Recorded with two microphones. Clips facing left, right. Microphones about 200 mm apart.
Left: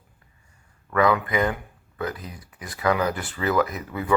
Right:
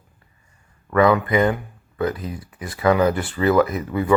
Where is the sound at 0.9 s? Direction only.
25° right (ahead or behind).